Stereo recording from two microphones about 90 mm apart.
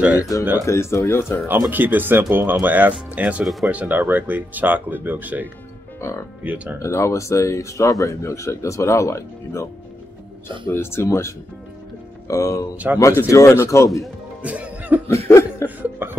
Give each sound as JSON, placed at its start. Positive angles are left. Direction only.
{"t": 0.2, "sound": "speech", "side_deg": 40}
{"t": 1.7, "sound": "speech", "side_deg": -20}
{"t": 5.9, "sound": "speech", "side_deg": 30}
{"t": 6.4, "sound": "speech", "side_deg": -15}
{"t": 6.8, "sound": "speech", "side_deg": 35}
{"t": 10.7, "sound": "speech", "side_deg": 25}
{"t": 12.7, "sound": "speech", "side_deg": -20}
{"t": 13.0, "sound": "speech", "side_deg": 30}
{"t": 14.4, "sound": "music", "side_deg": -15}
{"t": 15.0, "sound": "chuckle", "side_deg": 30}
{"t": 15.8, "sound": "chuckle", "side_deg": -25}